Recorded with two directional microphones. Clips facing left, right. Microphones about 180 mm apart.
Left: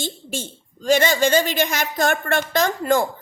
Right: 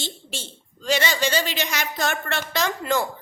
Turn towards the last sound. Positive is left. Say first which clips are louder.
# left 5 dB
turn(degrees=50)  # may be behind; listen again after turning